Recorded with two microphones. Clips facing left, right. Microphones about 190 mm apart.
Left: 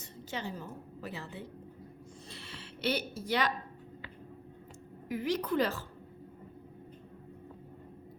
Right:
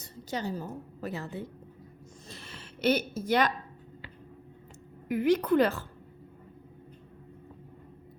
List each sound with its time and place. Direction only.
0.0 s a woman's voice: 40° right (ahead or behind)
2.3 s a sound: 45° right (ahead or behind)
5.0 s a woman's voice: 55° right (ahead or behind)